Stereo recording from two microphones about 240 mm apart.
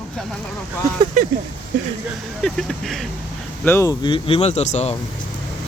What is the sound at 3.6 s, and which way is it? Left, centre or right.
Speech, centre.